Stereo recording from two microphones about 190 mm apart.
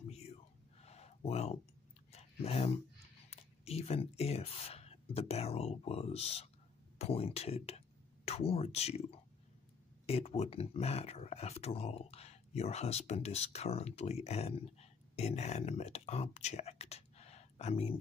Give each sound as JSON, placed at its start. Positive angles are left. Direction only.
{"t": 0.1, "sound": "whispering", "side_deg": 35}
{"t": 2.1, "sound": "a sound", "side_deg": 35}
{"t": 3.3, "sound": "speech", "side_deg": 35}